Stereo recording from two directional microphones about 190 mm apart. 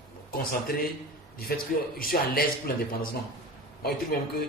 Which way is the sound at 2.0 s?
50° left (ahead or behind).